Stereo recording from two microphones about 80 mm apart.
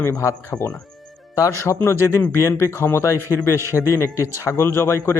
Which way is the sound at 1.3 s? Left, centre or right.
Left.